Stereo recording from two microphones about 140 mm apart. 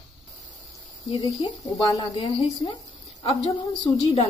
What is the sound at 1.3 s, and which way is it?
Speech, 45° left (ahead or behind).